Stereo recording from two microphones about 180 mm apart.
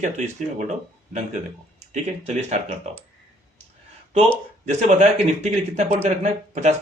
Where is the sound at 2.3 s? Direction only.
40° right (ahead or behind).